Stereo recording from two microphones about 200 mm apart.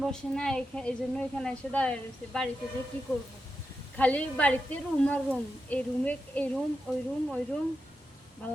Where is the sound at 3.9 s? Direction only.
5° left (ahead or behind).